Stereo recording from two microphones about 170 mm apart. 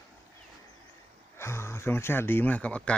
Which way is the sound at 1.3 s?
15° left (ahead or behind).